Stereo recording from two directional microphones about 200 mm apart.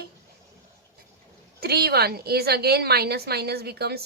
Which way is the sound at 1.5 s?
50° right (ahead or behind).